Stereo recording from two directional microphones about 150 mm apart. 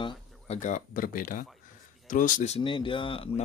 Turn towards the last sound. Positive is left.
turn(degrees=35)  # may be behind; listen again after turning